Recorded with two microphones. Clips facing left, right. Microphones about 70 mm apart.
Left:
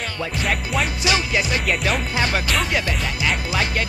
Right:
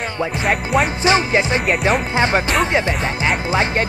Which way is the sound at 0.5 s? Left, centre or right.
Right.